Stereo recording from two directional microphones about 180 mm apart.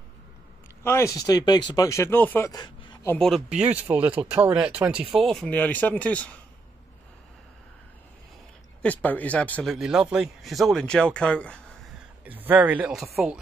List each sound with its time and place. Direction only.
0.8 s speech: 15° left (ahead or behind)
2.5 s a sound: 25° left (ahead or behind)
3.1 s a man's voice: centre (ahead or behind)
8.8 s a man's voice: 10° left (ahead or behind)
12.3 s speech: 10° right (ahead or behind)